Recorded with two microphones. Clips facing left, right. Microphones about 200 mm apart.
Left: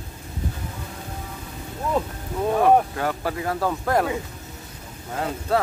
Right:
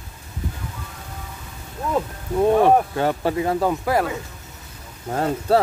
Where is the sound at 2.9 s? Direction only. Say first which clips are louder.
Right 5 dB; 25° right (ahead or behind).